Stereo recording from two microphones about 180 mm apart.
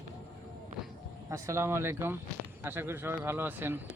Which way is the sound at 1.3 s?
15° right (ahead or behind).